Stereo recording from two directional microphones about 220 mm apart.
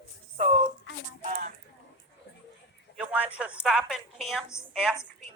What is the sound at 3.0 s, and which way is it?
A woman's voice, 5° right (ahead or behind).